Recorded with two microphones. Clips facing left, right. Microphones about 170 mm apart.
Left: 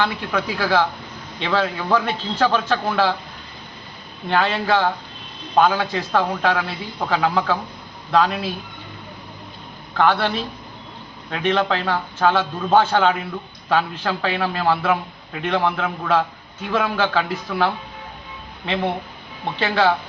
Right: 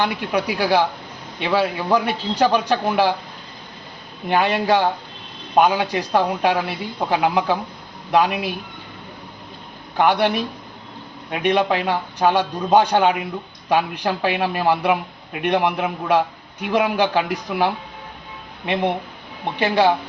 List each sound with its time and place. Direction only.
0.0 s a man's voice: 15° right (ahead or behind)
4.3 s a man's voice: 15° right (ahead or behind)
10.0 s a man's voice: 15° right (ahead or behind)